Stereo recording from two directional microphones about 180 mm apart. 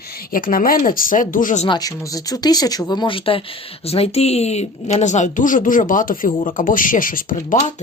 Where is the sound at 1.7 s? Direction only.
20° left (ahead or behind).